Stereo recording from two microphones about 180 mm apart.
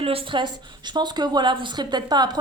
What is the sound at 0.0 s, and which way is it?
A woman's voice, 30° right (ahead or behind).